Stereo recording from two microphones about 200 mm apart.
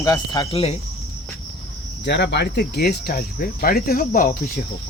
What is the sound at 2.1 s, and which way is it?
Cricket, 60° left (ahead or behind).